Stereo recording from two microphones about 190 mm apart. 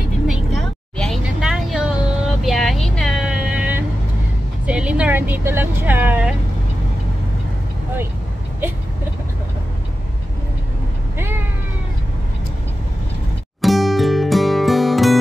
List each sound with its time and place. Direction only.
0.3 s vehicle: centre (ahead or behind)
4.6 s speech: 5° right (ahead or behind)
11.1 s cat: 10° right (ahead or behind)
13.6 s music: centre (ahead or behind)